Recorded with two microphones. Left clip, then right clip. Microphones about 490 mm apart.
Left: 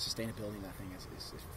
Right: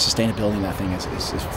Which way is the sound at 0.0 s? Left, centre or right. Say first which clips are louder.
Right 18 dB; left.